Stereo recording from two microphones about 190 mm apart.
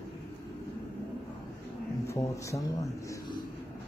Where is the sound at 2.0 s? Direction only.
15° left (ahead or behind).